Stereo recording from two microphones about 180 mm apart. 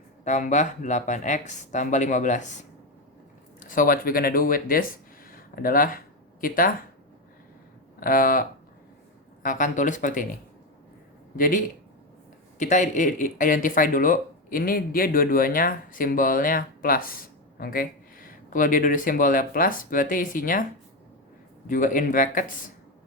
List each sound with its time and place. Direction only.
0.3 s speech: 40° left (ahead or behind)
3.6 s speech: 50° left (ahead or behind)
7.9 s speech: 50° left (ahead or behind)
11.3 s speech: 50° left (ahead or behind)
21.7 s speech: 50° left (ahead or behind)